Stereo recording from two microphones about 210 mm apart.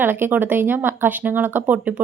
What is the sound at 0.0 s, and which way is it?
Speech, 10° right (ahead or behind).